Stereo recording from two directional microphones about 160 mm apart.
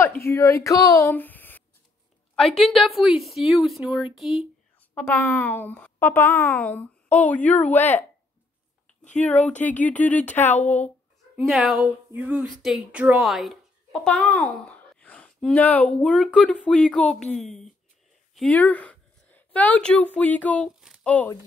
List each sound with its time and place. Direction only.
0.0 s a woman's voice: 15° left (ahead or behind); by 4.5 s centre (ahead or behind)
4.9 s a woman's voice: 10° left (ahead or behind)
8.8 s a sound: 10° left (ahead or behind)
9.6 s a woman's voice: 10° left (ahead or behind)
11.3 s a woman's voice: centre (ahead or behind)
20.8 s a sound: centre (ahead or behind)